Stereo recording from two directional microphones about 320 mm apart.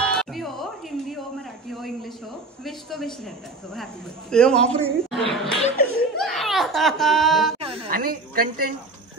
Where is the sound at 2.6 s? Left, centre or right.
Centre.